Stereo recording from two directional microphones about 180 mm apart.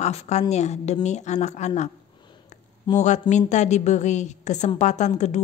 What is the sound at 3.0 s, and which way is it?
A woman's voice, 40° left (ahead or behind).